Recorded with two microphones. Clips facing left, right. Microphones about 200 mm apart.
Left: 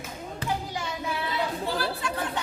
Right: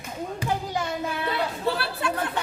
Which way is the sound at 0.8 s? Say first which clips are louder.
Right 3 dB; 60° right (ahead or behind).